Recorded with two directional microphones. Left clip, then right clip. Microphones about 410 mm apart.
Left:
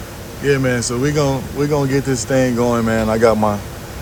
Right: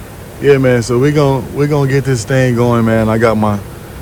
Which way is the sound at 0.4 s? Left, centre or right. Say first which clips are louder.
Right 7 dB; centre.